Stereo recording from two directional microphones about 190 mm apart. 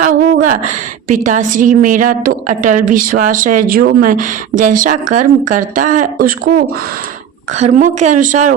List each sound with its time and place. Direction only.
0.1 s a woman's voice: 45° right (ahead or behind)
7.5 s a woman's voice: 40° right (ahead or behind)